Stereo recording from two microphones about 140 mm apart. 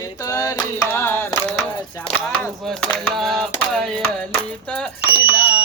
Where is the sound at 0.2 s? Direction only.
25° left (ahead or behind); by 4.0 s 5° left (ahead or behind).